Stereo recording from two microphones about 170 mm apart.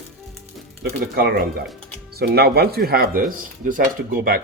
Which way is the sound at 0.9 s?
60° right (ahead or behind).